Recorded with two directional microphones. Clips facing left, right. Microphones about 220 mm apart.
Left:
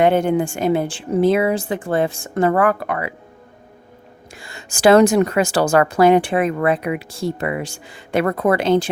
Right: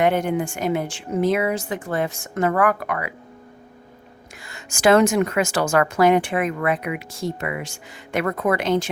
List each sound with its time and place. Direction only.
0.0 s speech: 30° left (ahead or behind)
4.4 s a woman's voice: 30° left (ahead or behind)